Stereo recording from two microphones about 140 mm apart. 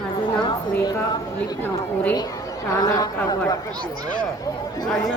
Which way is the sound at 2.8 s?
25° left (ahead or behind).